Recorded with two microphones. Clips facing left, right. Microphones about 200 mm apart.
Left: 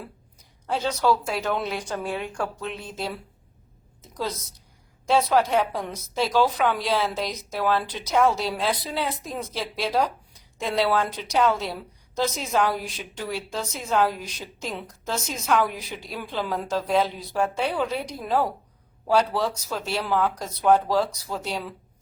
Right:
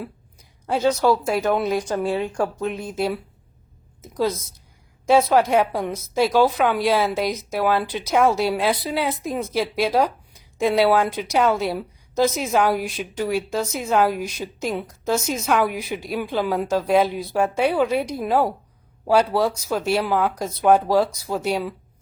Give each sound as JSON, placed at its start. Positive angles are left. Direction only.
{"t": 0.7, "sound": "a woman's voice", "side_deg": -10}
{"t": 1.3, "sound": "speech", "side_deg": -45}
{"t": 5.0, "sound": "a woman's voice", "side_deg": -10}